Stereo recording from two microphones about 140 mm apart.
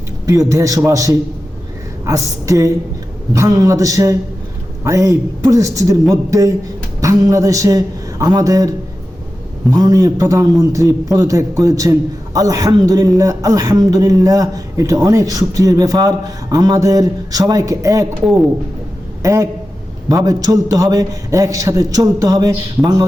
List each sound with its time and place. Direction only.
0.3 s a man's voice: 25° right (ahead or behind)
9.7 s a man's voice: 25° right (ahead or behind)
19.2 s a man's voice: 20° right (ahead or behind)